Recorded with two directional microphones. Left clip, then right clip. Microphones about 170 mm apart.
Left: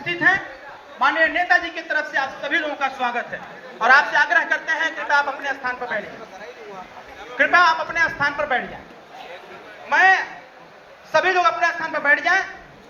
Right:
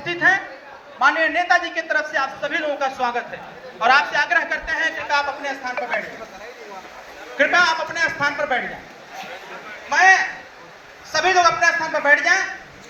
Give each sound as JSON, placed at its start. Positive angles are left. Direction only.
{"t": 0.0, "sound": "chatter", "side_deg": -40}
{"t": 0.9, "sound": "a man's voice", "side_deg": -30}
{"t": 3.8, "sound": "speech", "side_deg": -45}
{"t": 7.3, "sound": "speech", "side_deg": -25}
{"t": 9.9, "sound": "a man's voice", "side_deg": -40}